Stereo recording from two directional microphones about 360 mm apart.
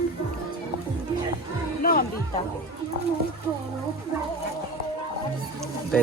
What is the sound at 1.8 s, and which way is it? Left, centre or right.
Music, left.